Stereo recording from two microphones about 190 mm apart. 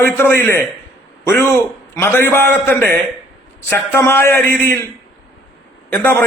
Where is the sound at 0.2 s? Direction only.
10° left (ahead or behind).